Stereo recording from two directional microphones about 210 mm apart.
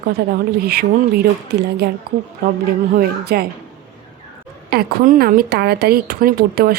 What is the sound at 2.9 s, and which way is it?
Speech, 45° right (ahead or behind).